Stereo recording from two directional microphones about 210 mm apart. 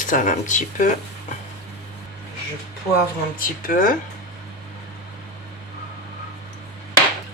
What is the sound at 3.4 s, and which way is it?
Speech, 40° left (ahead or behind).